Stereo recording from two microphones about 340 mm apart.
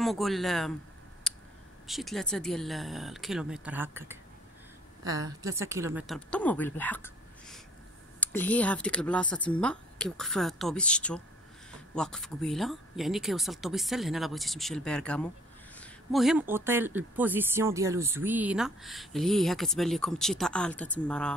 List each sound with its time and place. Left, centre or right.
0.0 s speech: centre
1.3 s a sound: centre
1.9 s a woman's voice: centre